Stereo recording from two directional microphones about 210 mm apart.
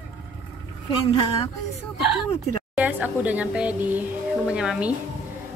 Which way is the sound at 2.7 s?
5° right (ahead or behind).